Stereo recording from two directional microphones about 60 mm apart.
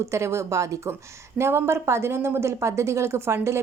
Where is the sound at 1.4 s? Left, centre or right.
Right.